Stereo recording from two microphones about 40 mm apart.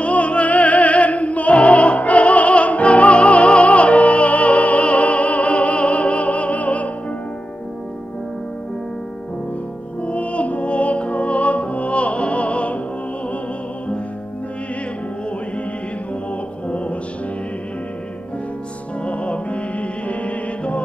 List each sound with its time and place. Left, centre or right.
0.0 s music: left
10.0 s music: left
16.6 s music: left
19.0 s music: left